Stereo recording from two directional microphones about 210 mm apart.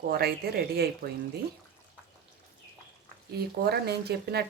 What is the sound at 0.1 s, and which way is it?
A woman's voice, 50° right (ahead or behind).